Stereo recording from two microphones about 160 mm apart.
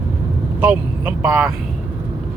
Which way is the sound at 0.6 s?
10° right (ahead or behind).